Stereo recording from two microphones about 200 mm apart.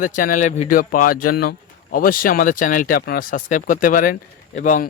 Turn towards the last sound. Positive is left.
turn(degrees=40)  # may be behind; listen again after turning